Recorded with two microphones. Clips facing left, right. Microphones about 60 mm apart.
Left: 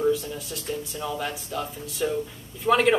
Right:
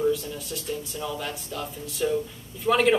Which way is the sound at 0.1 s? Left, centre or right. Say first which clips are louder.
Left 1 dB; centre.